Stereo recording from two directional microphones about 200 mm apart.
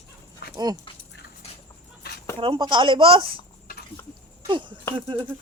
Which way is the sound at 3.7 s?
45° left (ahead or behind).